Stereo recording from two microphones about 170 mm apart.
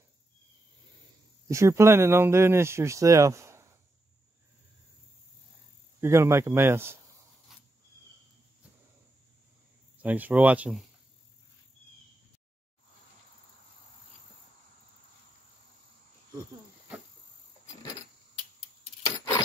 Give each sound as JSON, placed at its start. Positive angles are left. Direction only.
{"t": 1.5, "sound": "speech", "side_deg": -15}
{"t": 5.9, "sound": "speech", "side_deg": -15}
{"t": 10.0, "sound": "speech", "side_deg": -10}
{"t": 19.0, "sound": "keys jangling", "side_deg": 20}